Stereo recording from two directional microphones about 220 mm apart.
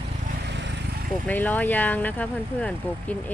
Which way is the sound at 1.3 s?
5° left (ahead or behind).